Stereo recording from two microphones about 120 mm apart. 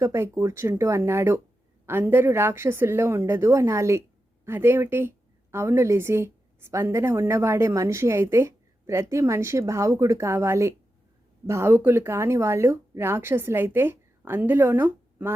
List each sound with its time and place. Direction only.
0.0 s a woman's voice: 25° right (ahead or behind)